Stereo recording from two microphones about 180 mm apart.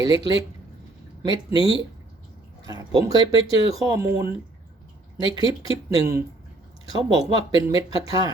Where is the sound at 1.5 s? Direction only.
30° left (ahead or behind).